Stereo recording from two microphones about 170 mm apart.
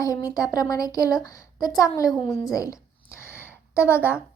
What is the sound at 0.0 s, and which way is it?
A woman's voice, 20° left (ahead or behind).